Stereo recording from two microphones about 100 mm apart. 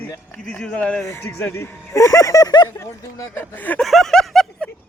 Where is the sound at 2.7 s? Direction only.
30° left (ahead or behind).